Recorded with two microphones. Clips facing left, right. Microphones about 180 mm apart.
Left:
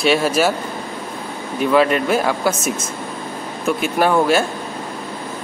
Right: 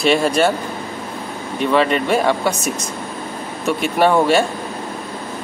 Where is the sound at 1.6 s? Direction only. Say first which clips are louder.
Left 1 dB; 5° left (ahead or behind).